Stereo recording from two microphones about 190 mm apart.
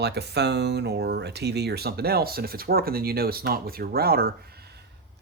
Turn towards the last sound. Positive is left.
turn(degrees=-55)  # may be behind; listen again after turning